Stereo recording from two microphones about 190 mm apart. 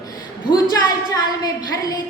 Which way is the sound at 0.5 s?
20° left (ahead or behind).